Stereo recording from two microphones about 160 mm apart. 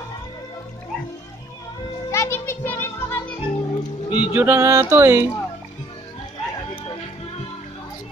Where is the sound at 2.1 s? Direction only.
15° left (ahead or behind).